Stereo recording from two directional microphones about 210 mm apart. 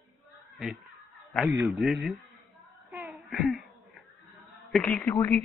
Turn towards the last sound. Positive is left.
turn(degrees=15)  # may be behind; listen again after turning